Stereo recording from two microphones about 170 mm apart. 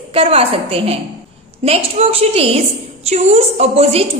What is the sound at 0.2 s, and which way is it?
A woman's voice, 35° right (ahead or behind).